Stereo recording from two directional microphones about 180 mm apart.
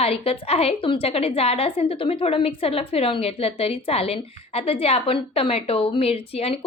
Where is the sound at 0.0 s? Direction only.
35° left (ahead or behind).